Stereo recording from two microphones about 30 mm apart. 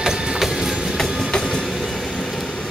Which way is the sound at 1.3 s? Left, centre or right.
Left.